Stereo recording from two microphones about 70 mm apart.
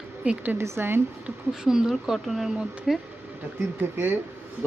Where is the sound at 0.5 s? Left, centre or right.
Right.